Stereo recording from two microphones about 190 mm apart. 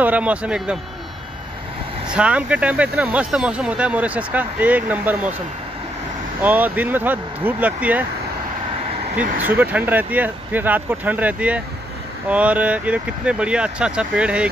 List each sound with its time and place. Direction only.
0.0 s speech: 5° right (ahead or behind)
2.0 s speech: 5° right (ahead or behind)
6.4 s speech: 10° right (ahead or behind)
9.4 s speech: 10° right (ahead or behind)